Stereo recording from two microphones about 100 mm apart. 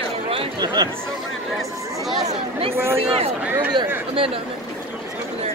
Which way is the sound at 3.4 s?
20° right (ahead or behind).